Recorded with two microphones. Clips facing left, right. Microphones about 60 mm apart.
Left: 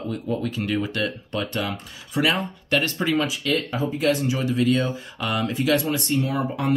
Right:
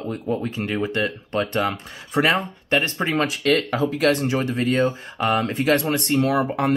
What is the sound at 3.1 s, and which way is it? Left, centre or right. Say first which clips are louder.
Speech: right 4 dB; right.